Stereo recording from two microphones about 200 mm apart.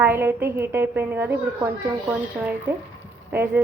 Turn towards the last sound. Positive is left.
turn(degrees=-10)  # may be behind; listen again after turning